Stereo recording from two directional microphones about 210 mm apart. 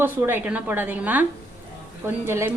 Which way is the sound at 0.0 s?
10° right (ahead or behind).